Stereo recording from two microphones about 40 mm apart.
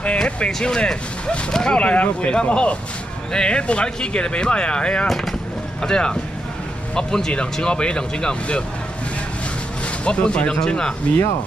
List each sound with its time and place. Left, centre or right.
0.0 s a sound: left
0.5 s speech: centre
1.8 s speech: left
5.0 s speech: centre
5.8 s speech: centre
10.0 s speech: left